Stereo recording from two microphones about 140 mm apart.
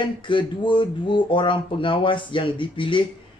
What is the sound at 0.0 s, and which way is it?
Speech, 35° left (ahead or behind).